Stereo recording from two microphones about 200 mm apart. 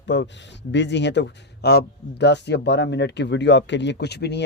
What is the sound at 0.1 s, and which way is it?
A man's voice, 65° left (ahead or behind).